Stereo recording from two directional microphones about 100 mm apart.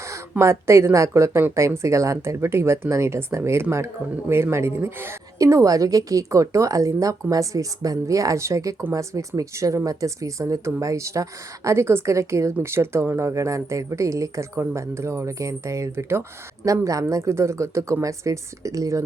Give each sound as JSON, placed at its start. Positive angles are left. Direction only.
{"t": 0.1, "sound": "a woman's voice", "side_deg": -25}